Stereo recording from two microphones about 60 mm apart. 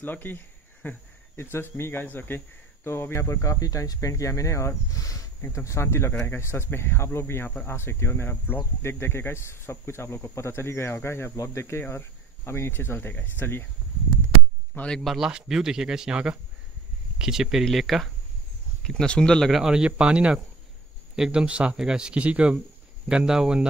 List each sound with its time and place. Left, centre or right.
0.0 s speech: left
5.5 s speech: left
15.0 s speech: centre
18.9 s speech: centre
19.5 s speech: centre